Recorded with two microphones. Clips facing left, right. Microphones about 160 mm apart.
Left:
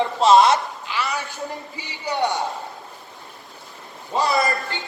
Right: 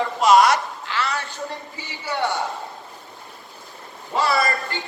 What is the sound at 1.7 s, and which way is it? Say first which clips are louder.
Speech: left 2 dB; 15° left (ahead or behind).